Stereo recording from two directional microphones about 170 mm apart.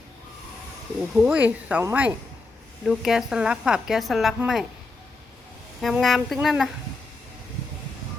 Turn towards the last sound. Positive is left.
turn(degrees=0)  # may be behind; listen again after turning